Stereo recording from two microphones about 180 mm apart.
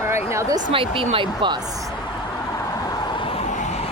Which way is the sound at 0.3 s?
15° right (ahead or behind).